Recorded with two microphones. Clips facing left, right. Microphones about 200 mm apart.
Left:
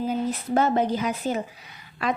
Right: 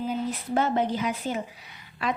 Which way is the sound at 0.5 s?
40° left (ahead or behind).